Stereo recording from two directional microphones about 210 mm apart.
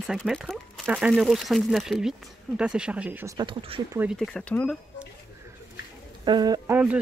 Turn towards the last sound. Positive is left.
turn(degrees=-20)  # may be behind; listen again after turning